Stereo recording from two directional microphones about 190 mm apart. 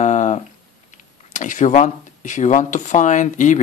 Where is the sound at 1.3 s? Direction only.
40° left (ahead or behind).